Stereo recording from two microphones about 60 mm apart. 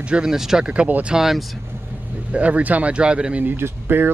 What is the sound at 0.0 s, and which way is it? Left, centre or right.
Speech, centre.